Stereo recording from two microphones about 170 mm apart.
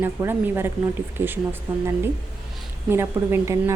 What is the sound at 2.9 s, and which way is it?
Speech, 15° right (ahead or behind).